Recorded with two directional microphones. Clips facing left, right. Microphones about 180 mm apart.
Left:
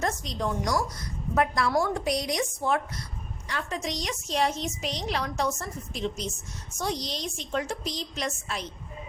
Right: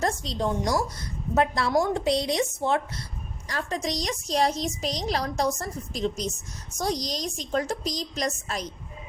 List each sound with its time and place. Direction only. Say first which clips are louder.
0.0 s a woman's voice: right 3 dB; 30° right (ahead or behind)
3.5 s a woman's voice: right 3 dB; 35° right (ahead or behind)